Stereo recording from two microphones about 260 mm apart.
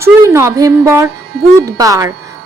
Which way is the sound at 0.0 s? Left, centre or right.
Centre.